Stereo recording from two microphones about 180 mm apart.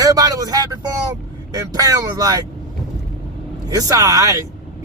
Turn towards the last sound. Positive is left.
turn(degrees=-20)  # may be behind; listen again after turning